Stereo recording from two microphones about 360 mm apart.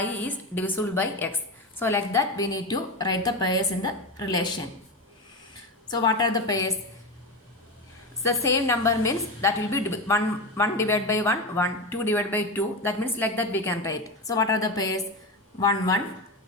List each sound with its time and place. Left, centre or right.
0.0 s a woman's voice: centre
5.9 s a woman's voice: centre
8.2 s a woman's voice: centre